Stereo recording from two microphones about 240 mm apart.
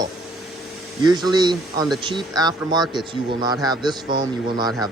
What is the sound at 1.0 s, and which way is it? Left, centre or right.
A man's voice, centre.